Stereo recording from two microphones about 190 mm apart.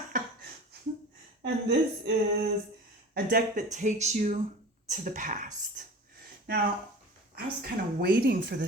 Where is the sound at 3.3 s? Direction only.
40° right (ahead or behind).